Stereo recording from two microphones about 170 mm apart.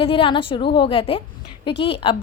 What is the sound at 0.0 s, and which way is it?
A woman's voice, 30° left (ahead or behind).